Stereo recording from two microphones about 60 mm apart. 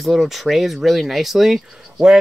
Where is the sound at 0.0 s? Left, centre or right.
Centre.